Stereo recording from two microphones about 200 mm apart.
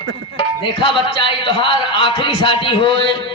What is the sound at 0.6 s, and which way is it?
A man's voice, 25° left (ahead or behind).